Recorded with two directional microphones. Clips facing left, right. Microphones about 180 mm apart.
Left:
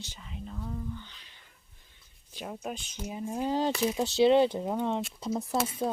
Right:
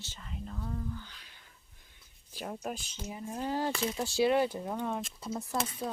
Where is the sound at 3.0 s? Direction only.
15° left (ahead or behind).